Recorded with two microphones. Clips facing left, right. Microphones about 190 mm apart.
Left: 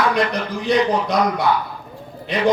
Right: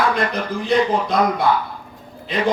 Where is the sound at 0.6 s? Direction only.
55° right (ahead or behind).